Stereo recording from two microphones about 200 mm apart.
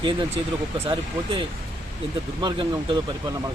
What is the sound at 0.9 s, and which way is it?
Speech, 25° right (ahead or behind).